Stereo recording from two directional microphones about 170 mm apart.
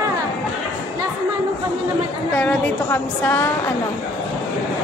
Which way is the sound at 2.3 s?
10° left (ahead or behind).